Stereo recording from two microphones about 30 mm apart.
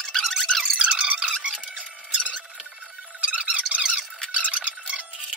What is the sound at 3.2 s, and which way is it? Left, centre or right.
Music, right.